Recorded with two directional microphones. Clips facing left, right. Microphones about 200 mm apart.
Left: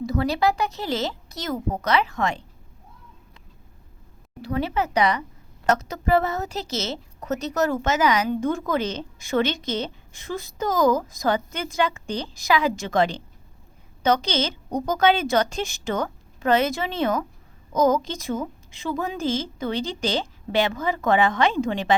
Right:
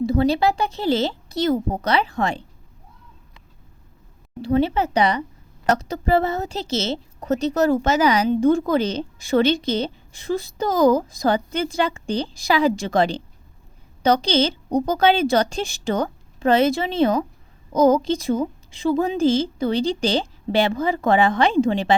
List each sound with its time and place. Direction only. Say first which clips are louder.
0.0 s a woman's voice: right 4 dB; 30° right (ahead or behind)
4.4 s a woman's voice: right 6 dB; 30° right (ahead or behind)